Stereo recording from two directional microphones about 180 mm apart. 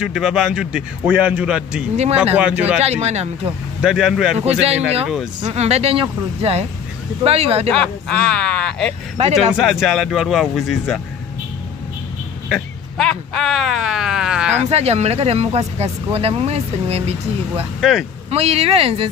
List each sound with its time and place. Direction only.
0.0 s a man's voice: 5° right (ahead or behind)
2.8 s speech: 35° right (ahead or behind)
3.8 s a man's voice: 5° right (ahead or behind)
4.5 s speech: 35° right (ahead or behind)
7.7 s a man's voice: 5° left (ahead or behind)
9.2 s speech: 35° right (ahead or behind)
9.5 s a man's voice: centre (ahead or behind)
12.4 s speech: centre (ahead or behind)
14.7 s speech: 35° right (ahead or behind)
17.7 s a man's voice: centre (ahead or behind)
18.3 s speech: 35° right (ahead or behind)